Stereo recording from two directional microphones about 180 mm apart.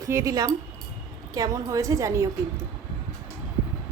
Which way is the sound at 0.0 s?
15° right (ahead or behind).